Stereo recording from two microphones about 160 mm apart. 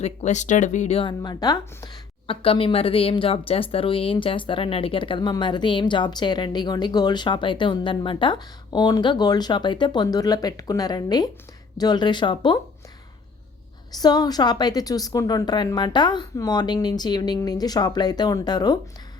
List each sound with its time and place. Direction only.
0.0 s speech: 45° left (ahead or behind); by 12.5 s 30° left (ahead or behind)
13.9 s speech: 25° left (ahead or behind)